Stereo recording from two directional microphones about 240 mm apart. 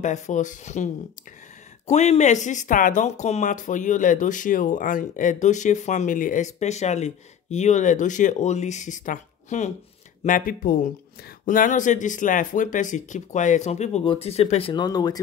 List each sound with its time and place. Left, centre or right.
0.0 s speech: left
1.9 s speech: left